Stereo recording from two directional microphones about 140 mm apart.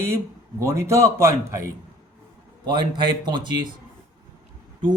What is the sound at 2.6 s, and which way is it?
Speech, 30° right (ahead or behind).